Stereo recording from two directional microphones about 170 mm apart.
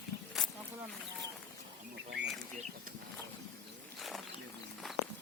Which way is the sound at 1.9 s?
90° right.